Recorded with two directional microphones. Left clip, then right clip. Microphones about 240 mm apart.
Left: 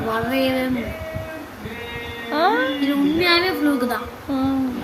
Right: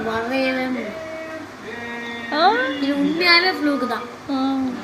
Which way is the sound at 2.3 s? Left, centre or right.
Centre.